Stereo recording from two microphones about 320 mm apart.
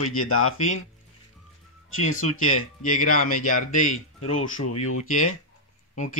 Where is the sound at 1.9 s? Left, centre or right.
Left.